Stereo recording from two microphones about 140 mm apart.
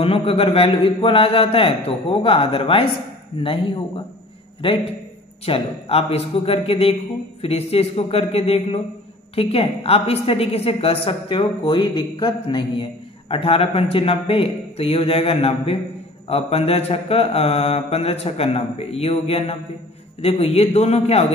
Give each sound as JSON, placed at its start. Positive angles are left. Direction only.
{"t": 0.0, "sound": "a man's voice", "side_deg": 40}
{"t": 5.4, "sound": "a woman's voice", "side_deg": 45}